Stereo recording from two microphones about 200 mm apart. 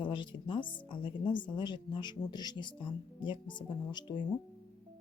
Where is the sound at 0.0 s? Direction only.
25° left (ahead or behind).